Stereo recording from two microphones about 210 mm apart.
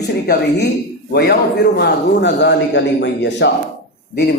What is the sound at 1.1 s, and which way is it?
A man's voice, 50° left (ahead or behind).